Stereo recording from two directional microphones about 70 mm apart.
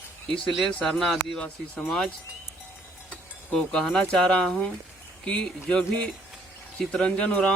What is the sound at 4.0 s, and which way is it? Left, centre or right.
Speech, centre.